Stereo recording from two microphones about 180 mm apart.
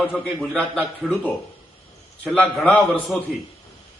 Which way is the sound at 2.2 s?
5° left (ahead or behind).